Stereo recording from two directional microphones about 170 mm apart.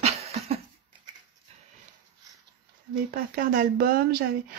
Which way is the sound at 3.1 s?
55° right (ahead or behind).